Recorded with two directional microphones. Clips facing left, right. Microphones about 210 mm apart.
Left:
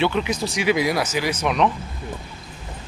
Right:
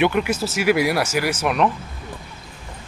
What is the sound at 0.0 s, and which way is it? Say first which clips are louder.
Speech: right 2 dB; 10° right (ahead or behind).